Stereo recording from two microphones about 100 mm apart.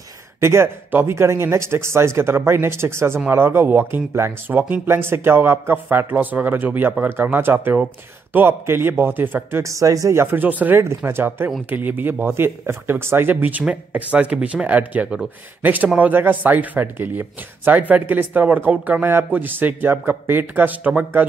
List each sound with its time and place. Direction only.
0.4 s speech: 25° right (ahead or behind)
9.6 s speech: 30° right (ahead or behind); by 21.3 s 15° right (ahead or behind)